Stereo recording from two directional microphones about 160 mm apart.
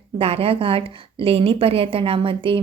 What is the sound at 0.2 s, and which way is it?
A woman's voice, 40° right (ahead or behind).